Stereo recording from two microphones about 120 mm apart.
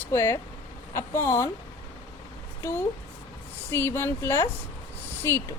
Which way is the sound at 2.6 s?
20° left (ahead or behind).